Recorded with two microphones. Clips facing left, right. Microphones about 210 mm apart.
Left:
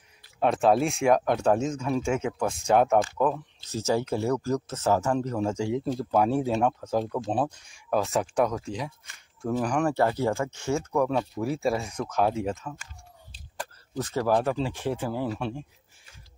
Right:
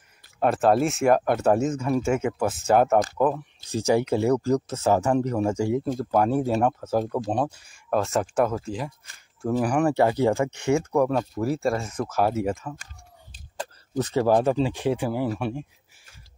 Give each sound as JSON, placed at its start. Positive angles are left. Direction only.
{"t": 0.4, "sound": "speech", "side_deg": 0}
{"t": 5.9, "sound": "speech", "side_deg": 0}
{"t": 11.1, "sound": "speech", "side_deg": 0}
{"t": 13.6, "sound": "speech", "side_deg": -20}